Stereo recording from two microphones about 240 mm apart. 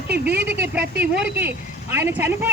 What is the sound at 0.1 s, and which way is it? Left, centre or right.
Speech, right.